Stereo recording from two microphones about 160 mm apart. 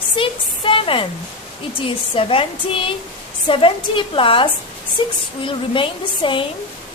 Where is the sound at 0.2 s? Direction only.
35° left (ahead or behind).